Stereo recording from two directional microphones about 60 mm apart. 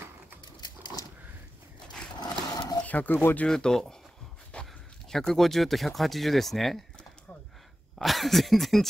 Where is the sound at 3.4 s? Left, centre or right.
Centre.